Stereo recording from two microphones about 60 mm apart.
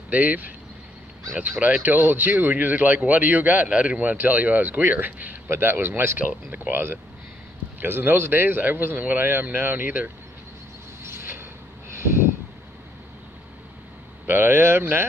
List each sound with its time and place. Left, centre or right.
0.1 s speech: right
1.6 s speech: right
5.5 s a man's voice: right
6.1 s speech: right
6.7 s a man's voice: right
11.1 s a sound: right
14.2 s a man's voice: right